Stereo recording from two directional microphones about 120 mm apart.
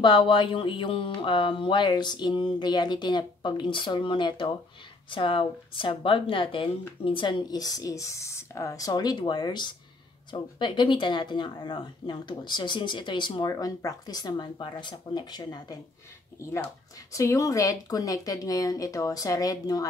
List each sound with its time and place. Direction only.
0.0 s speech: 40° left (ahead or behind)
13.5 s speech: 30° left (ahead or behind)
16.3 s speech: 25° left (ahead or behind)